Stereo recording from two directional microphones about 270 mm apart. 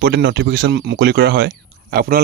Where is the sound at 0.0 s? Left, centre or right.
Right.